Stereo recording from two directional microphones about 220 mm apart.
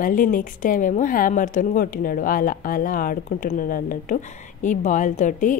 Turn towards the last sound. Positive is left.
turn(degrees=35)  # may be behind; listen again after turning